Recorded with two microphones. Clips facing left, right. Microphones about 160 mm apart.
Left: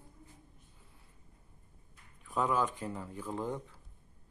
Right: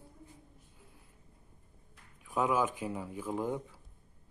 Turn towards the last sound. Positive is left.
turn(degrees=-5)  # may be behind; listen again after turning